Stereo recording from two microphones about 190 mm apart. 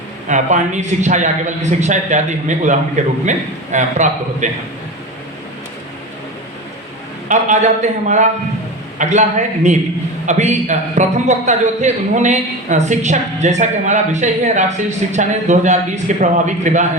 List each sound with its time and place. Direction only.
0.3 s a man's voice: 40° right (ahead or behind)
7.3 s a man's voice: 40° right (ahead or behind)
10.2 s a man's voice: 40° right (ahead or behind)